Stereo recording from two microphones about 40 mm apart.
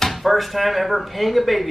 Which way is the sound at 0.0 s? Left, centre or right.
Centre.